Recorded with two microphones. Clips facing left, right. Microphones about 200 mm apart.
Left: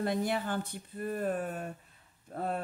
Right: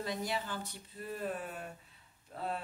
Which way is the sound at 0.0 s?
55° left (ahead or behind).